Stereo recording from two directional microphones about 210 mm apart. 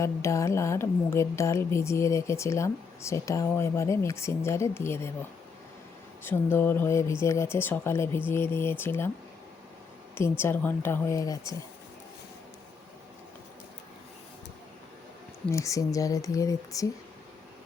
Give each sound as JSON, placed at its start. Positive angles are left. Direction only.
{"t": 0.0, "sound": "a woman's voice", "side_deg": 15}
{"t": 6.2, "sound": "a woman's voice", "side_deg": 10}
{"t": 10.2, "sound": "a woman's voice", "side_deg": 10}
{"t": 15.5, "sound": "a woman's voice", "side_deg": 15}